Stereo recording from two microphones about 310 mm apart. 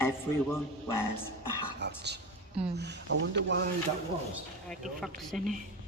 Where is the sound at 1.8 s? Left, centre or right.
Right.